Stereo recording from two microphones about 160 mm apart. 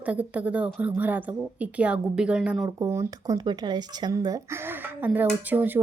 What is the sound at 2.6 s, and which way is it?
A woman's voice, 20° right (ahead or behind).